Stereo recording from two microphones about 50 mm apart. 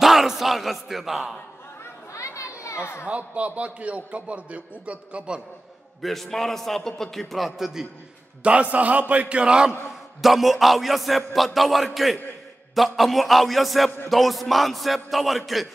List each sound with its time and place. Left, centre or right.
0.0 s speech: centre
2.1 s children playing: left
3.1 s a man's voice: right
6.0 s a sound: centre
8.5 s a man's voice: right
9.8 s a sound: centre